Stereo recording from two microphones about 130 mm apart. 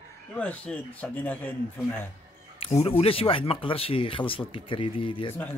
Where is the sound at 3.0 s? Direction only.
45° left (ahead or behind).